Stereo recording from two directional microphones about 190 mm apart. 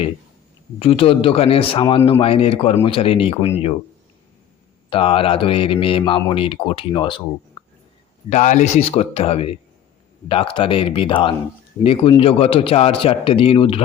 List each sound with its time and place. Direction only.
0.8 s speech: 30° left (ahead or behind)
4.9 s speech: 30° left (ahead or behind)
7.6 s a sound: 25° left (ahead or behind)
8.3 s a man's voice: 40° left (ahead or behind)